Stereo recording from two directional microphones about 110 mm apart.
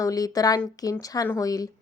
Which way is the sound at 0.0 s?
35° left (ahead or behind).